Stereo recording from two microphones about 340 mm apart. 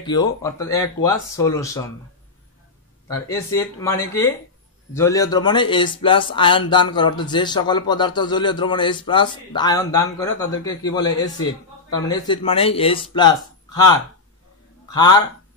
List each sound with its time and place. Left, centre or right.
0.0 s speech: centre
3.3 s speech: centre